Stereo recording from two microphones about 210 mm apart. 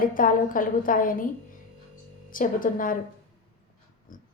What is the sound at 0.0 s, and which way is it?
A woman's voice, 40° left (ahead or behind).